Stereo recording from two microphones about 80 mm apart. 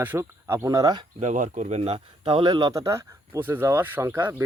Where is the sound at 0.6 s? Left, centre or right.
Right.